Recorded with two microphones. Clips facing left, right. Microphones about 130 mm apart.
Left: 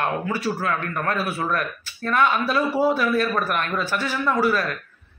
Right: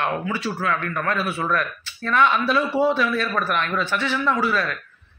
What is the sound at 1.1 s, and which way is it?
A man's voice, centre (ahead or behind).